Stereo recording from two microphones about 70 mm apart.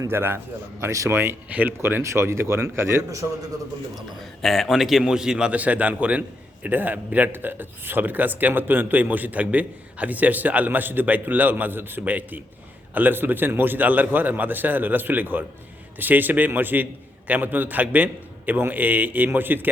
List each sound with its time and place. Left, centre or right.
0.1 s a man's voice: right
0.8 s speech: right
1.1 s a man's voice: right
1.5 s a man's voice: right
1.8 s a man's voice: right
4.4 s a man's voice: centre; by 19.6 s right